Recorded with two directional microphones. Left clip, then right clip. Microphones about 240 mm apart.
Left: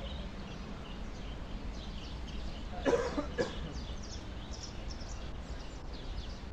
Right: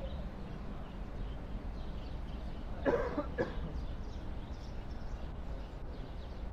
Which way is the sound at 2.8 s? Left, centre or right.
Left.